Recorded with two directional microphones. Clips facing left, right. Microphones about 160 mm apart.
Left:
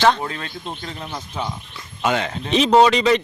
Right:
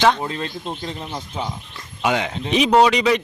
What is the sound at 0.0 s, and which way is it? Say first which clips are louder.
A man's voice: even; 15° right (ahead or behind).